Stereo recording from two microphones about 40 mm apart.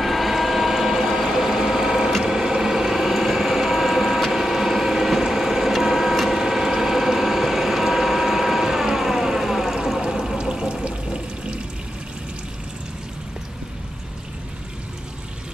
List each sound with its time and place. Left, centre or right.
0.0 s a sound: centre
6.3 s vehicle: centre
10.0 s water: centre